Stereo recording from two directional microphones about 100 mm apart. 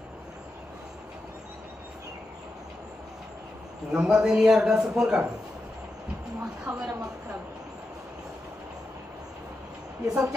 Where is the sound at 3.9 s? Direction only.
5° right (ahead or behind).